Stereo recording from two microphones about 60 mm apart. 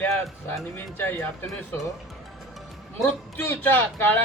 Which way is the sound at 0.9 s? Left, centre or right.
Left.